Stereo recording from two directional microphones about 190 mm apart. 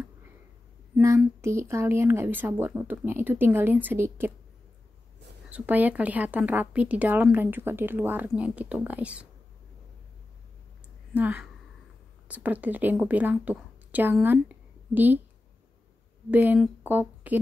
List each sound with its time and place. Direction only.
0.9 s a sound: 15° right (ahead or behind)
1.2 s a woman's voice: 15° right (ahead or behind)
5.5 s a woman's voice: 10° right (ahead or behind)
11.1 s a woman's voice: 10° right (ahead or behind)
16.3 s a woman's voice: 10° right (ahead or behind)